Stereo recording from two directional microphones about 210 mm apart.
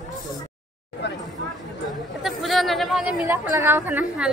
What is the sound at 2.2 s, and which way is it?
Chatter, centre (ahead or behind).